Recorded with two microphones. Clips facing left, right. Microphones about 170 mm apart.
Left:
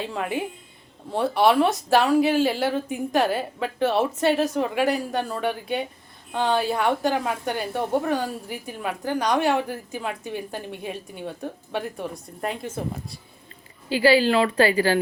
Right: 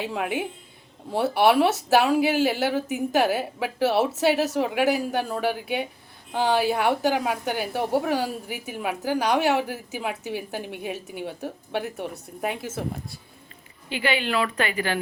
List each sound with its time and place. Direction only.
0.0 s a woman's voice: 5° right (ahead or behind)
13.9 s speech: 35° left (ahead or behind)